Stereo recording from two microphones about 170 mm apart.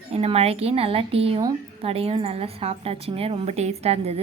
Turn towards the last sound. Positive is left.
turn(degrees=-35)  # may be behind; listen again after turning